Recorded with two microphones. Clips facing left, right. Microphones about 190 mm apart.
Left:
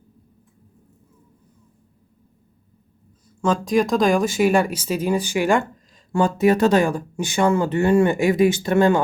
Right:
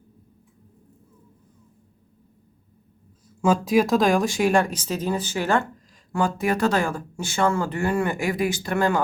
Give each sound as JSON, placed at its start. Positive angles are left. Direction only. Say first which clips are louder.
{"t": 3.4, "sound": "speech", "louder": "even", "side_deg": -5}